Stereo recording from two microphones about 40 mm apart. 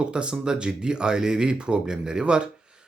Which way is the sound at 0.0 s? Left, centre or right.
Right.